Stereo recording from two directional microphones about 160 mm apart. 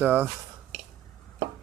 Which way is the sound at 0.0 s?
10° right (ahead or behind).